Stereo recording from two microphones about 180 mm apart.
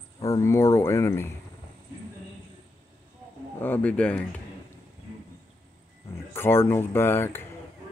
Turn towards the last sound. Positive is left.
turn(degrees=10)  # may be behind; listen again after turning